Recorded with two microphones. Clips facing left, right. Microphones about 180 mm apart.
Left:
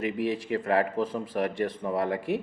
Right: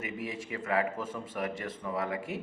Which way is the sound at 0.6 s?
35° left (ahead or behind).